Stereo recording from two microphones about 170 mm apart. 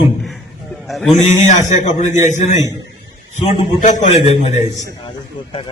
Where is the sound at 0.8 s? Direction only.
Centre (ahead or behind).